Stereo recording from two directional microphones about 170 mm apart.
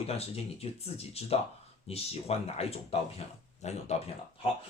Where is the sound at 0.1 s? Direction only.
35° left (ahead or behind).